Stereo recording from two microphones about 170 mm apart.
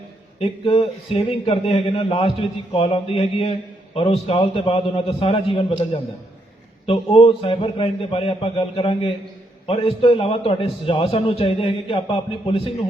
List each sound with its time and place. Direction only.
0.3 s a man's voice: 35° left (ahead or behind)